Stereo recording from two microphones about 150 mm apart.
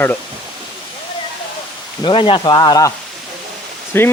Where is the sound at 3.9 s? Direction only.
15° left (ahead or behind).